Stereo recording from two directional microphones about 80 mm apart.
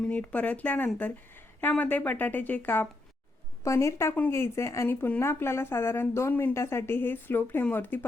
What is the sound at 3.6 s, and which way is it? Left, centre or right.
A woman's voice, left.